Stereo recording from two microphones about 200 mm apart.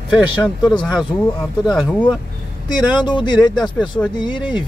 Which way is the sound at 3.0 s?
20° left (ahead or behind).